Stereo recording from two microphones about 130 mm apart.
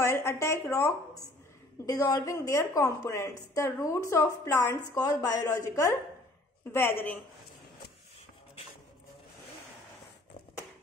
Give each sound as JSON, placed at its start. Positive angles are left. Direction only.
{"t": 0.0, "sound": "a woman's voice", "side_deg": 20}